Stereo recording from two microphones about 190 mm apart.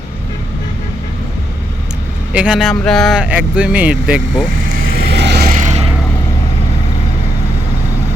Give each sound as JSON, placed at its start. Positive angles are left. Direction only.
{"t": 2.3, "sound": "speech", "side_deg": -5}
{"t": 4.9, "sound": "vehicle", "side_deg": -65}